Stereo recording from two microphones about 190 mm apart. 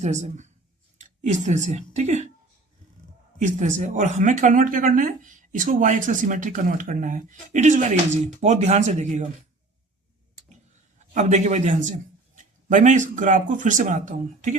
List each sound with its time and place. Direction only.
0.0 s speech: 40° right (ahead or behind)
3.4 s speech: 40° right (ahead or behind)
11.1 s speech: 40° right (ahead or behind)